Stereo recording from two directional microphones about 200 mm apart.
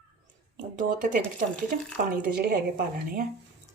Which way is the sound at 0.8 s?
40° right (ahead or behind).